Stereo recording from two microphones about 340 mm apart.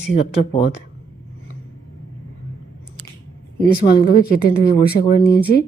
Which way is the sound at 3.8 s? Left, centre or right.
Left.